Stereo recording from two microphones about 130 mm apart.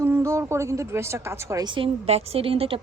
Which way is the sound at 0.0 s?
20° right (ahead or behind).